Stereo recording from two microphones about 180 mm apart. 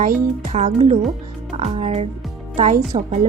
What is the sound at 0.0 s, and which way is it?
Speech, 45° right (ahead or behind).